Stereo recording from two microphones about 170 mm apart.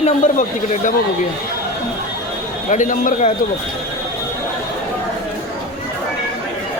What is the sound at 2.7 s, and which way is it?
Speech, 50° left (ahead or behind).